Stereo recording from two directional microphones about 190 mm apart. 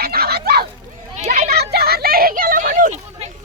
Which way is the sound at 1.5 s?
55° right (ahead or behind).